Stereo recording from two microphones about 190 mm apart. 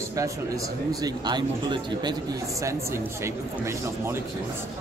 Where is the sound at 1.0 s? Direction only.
25° right (ahead or behind).